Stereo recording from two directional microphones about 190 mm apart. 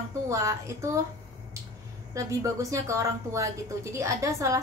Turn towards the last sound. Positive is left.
turn(degrees=-15)  # may be behind; listen again after turning